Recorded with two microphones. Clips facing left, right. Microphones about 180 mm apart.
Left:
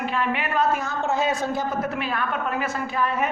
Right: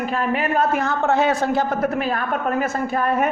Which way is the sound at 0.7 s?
65° right (ahead or behind).